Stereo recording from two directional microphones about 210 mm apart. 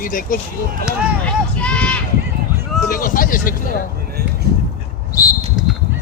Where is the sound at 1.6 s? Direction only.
5° left (ahead or behind).